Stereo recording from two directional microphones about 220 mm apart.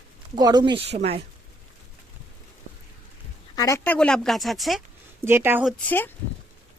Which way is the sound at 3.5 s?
15° left (ahead or behind).